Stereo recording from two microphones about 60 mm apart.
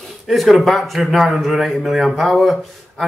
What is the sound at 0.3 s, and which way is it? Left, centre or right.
A man's voice, centre.